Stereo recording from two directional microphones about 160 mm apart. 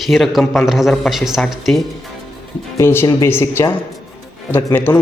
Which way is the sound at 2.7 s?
15° left (ahead or behind).